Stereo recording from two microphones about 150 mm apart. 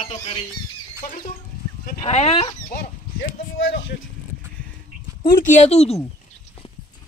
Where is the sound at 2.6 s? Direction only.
85° left.